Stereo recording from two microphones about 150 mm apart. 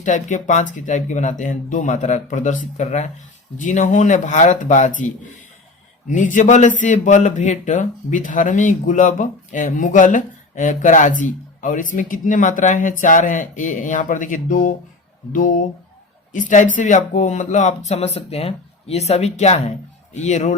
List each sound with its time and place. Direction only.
0.0 s a man's voice: 55° left (ahead or behind)
6.1 s a man's voice: 60° left (ahead or behind)